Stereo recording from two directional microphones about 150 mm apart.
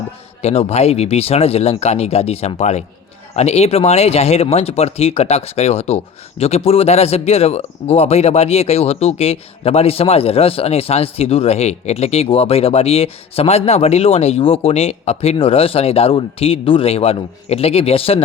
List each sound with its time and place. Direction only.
0.4 s speech: 45° left (ahead or behind)